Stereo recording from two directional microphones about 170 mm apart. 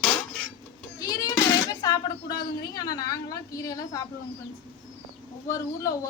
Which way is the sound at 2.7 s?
20° left (ahead or behind).